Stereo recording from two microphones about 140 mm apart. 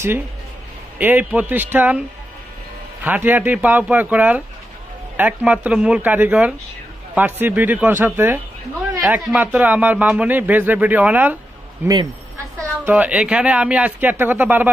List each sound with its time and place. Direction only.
0.9 s speech: 10° right (ahead or behind)